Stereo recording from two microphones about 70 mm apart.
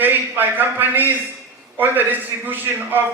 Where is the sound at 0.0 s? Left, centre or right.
Right.